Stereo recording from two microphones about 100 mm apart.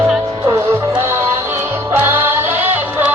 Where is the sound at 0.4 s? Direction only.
25° right (ahead or behind).